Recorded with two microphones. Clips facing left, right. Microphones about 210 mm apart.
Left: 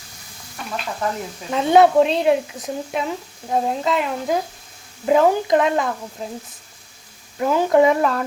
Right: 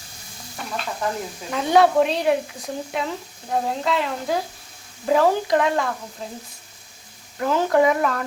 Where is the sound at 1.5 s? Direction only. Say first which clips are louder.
Left 3 dB; 20° left (ahead or behind).